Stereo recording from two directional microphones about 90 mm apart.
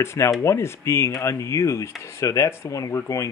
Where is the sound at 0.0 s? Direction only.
30° left (ahead or behind).